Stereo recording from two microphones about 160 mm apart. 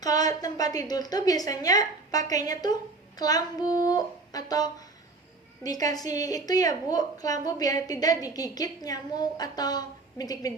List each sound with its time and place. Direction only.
0.0 s a woman's voice: 25° left (ahead or behind)